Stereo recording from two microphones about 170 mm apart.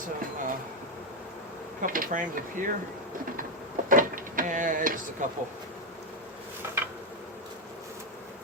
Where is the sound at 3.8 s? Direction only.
55° right (ahead or behind).